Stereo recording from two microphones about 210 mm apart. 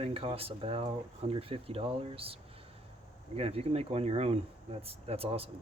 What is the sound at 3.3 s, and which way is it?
Speech, 30° right (ahead or behind).